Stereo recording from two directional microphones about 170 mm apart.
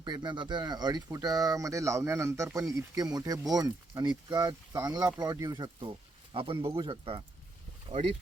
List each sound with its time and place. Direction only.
0.0 s speech: 25° right (ahead or behind)